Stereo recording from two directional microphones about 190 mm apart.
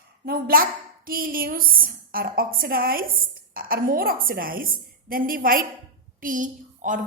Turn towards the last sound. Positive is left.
turn(degrees=-45)  # may be behind; listen again after turning